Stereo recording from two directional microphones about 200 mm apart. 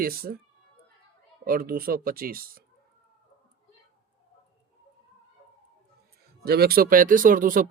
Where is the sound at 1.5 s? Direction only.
45° right (ahead or behind).